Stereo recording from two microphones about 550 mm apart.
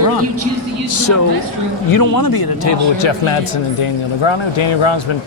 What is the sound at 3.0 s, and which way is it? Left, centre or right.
Speech, left.